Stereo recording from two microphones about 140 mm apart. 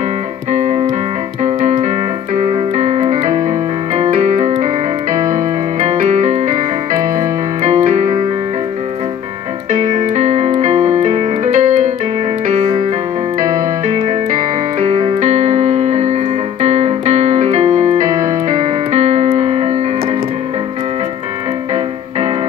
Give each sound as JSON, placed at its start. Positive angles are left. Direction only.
{"t": 0.5, "sound": "keyboard", "side_deg": -55}
{"t": 2.7, "sound": "piano", "side_deg": -55}
{"t": 3.9, "sound": "keyboard", "side_deg": -50}
{"t": 5.1, "sound": "music", "side_deg": -65}
{"t": 9.7, "sound": "music", "side_deg": -65}
{"t": 10.6, "sound": "keyboard", "side_deg": -50}
{"t": 13.4, "sound": "music", "side_deg": -60}
{"t": 16.6, "sound": "keyboard", "side_deg": -55}
{"t": 18.9, "sound": "music", "side_deg": -55}